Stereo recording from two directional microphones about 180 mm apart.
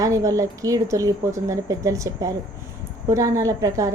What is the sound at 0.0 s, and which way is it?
A woman's voice, 20° right (ahead or behind).